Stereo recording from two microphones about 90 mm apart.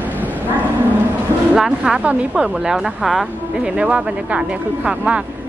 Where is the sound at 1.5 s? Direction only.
10° right (ahead or behind).